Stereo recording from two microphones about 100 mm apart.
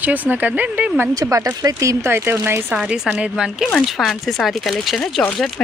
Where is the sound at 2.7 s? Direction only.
10° right (ahead or behind).